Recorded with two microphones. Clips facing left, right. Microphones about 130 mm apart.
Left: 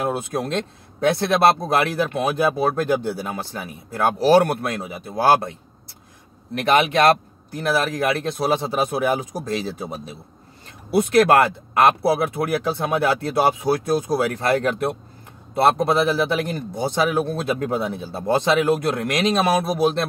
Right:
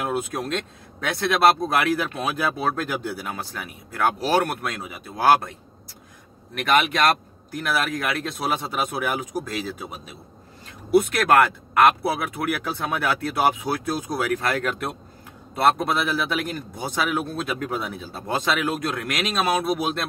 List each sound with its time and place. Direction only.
0.0 s speech: 25° left (ahead or behind)
6.6 s speech: 30° left (ahead or behind)